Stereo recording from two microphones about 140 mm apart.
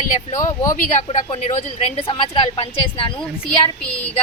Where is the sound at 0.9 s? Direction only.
55° left (ahead or behind).